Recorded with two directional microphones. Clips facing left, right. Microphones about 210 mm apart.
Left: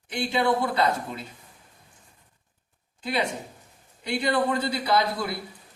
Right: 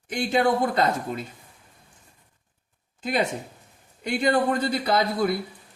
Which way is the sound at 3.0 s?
45° right (ahead or behind).